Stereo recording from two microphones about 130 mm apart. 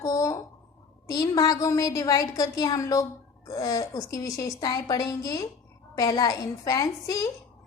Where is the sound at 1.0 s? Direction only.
30° left (ahead or behind).